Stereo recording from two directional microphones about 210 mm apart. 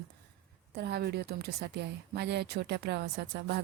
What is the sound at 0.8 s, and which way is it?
A woman's voice, 50° right (ahead or behind).